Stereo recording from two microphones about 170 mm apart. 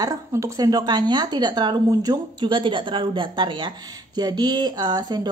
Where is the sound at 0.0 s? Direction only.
20° right (ahead or behind).